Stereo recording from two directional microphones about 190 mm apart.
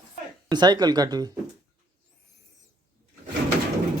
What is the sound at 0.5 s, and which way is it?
Speech, 20° right (ahead or behind).